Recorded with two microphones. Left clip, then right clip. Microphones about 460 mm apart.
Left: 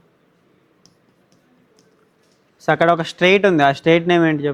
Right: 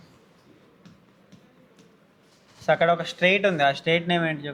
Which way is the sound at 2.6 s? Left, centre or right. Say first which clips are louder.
Left 5 dB; left.